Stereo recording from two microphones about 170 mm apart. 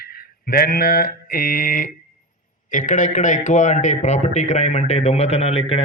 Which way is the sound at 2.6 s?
50° left (ahead or behind).